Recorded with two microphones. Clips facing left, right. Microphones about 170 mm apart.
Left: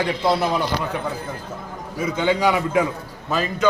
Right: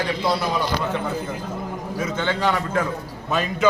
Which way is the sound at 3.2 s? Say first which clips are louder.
Even; centre (ahead or behind).